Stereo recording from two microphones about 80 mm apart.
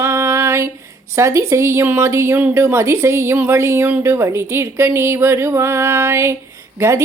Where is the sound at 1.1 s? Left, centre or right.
Right.